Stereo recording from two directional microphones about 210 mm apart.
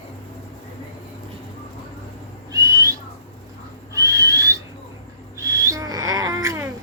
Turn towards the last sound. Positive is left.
turn(degrees=-15)  # may be behind; listen again after turning